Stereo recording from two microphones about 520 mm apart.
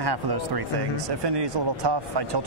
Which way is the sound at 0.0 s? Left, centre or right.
Right.